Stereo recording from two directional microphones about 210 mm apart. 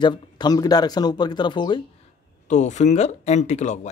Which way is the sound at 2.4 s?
35° left (ahead or behind).